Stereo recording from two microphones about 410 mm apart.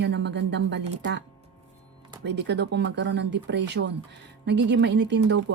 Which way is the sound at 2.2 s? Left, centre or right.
Right.